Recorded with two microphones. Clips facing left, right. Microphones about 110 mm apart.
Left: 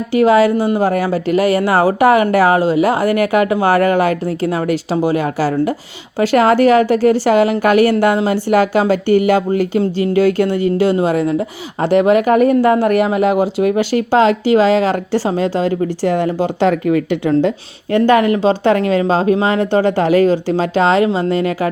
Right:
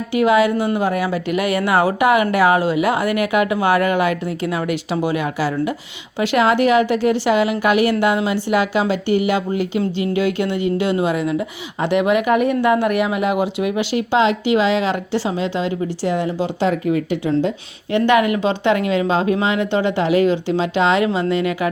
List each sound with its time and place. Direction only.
0.1 s a woman's voice: 35° left (ahead or behind); by 17.5 s 65° left (ahead or behind)
17.9 s a woman's voice: 40° left (ahead or behind)